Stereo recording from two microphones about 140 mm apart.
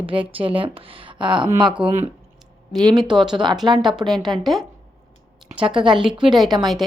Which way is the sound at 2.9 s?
Centre (ahead or behind).